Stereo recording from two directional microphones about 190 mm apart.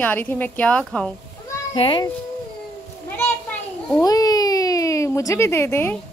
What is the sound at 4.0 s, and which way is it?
Speech, 20° left (ahead or behind).